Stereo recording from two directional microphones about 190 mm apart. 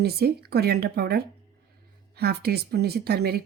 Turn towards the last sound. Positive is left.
turn(degrees=-55)  # may be behind; listen again after turning